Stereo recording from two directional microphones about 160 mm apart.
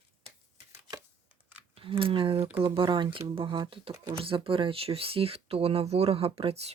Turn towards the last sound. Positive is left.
turn(degrees=-40)  # may be behind; listen again after turning